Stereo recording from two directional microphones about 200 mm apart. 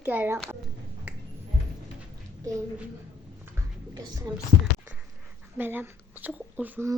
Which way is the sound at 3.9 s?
20° right (ahead or behind).